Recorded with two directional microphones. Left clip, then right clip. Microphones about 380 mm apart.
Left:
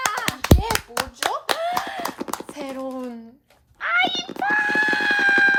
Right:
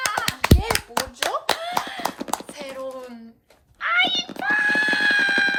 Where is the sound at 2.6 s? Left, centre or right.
Centre.